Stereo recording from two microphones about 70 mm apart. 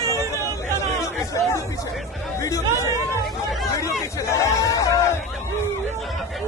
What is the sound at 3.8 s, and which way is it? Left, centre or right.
Hubbub, left.